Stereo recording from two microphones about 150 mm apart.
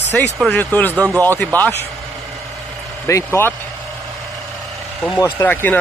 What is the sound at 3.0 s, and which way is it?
Speech, 20° left (ahead or behind).